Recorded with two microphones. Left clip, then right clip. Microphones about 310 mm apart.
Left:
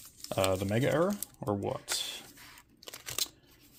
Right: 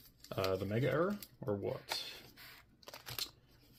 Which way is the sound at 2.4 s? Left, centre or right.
Centre.